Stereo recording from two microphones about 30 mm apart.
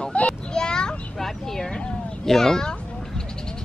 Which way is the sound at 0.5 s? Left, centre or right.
Left.